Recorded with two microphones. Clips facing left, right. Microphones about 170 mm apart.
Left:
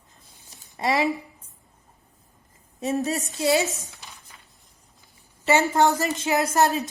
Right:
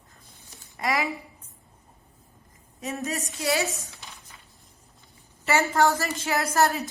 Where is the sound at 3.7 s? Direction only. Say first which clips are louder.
Even; centre (ahead or behind).